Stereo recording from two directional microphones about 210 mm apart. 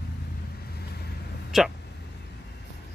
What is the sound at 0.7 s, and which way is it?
Vehicle, 50° left (ahead or behind).